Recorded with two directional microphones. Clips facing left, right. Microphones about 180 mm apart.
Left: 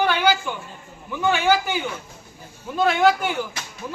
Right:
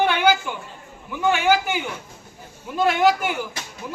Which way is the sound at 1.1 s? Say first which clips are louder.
Even; 10° right (ahead or behind).